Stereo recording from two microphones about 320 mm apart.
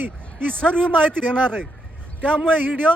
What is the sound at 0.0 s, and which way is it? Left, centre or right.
Speech, centre.